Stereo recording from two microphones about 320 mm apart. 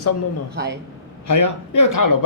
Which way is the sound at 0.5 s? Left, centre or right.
Right.